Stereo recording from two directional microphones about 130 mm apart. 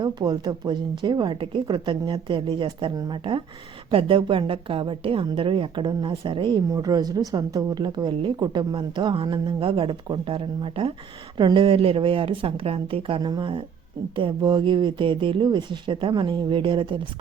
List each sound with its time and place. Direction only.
0.0 s speech: 30° right (ahead or behind)
6.7 s a woman's voice: 25° right (ahead or behind)